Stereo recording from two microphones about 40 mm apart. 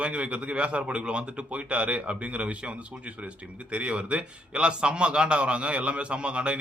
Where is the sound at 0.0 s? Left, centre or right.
Right.